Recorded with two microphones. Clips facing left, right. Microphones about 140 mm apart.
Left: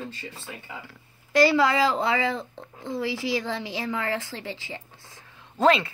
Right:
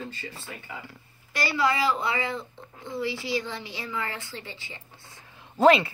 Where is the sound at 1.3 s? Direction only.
90° left.